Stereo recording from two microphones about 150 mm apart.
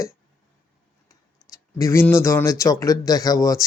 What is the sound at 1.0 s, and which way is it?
Speech, 20° left (ahead or behind).